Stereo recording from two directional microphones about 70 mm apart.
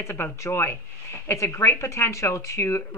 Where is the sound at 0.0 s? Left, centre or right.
Left.